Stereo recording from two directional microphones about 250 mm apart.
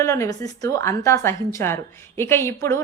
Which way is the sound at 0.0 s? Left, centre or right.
Centre.